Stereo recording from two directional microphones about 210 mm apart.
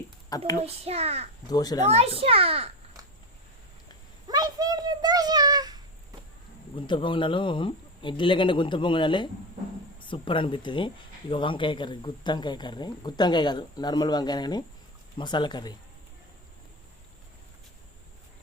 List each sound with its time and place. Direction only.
0.3 s a child's voice: 15° left (ahead or behind)
0.6 s a child's voice: 30° right (ahead or behind)
1.5 s a child's voice: 20° left (ahead or behind)
2.2 s a child's voice: 25° right (ahead or behind)
4.3 s a sound: 20° right (ahead or behind)
6.7 s speech: 25° left (ahead or behind)